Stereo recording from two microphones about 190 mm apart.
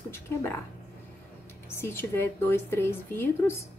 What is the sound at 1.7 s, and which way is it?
A woman's voice, 10° left (ahead or behind).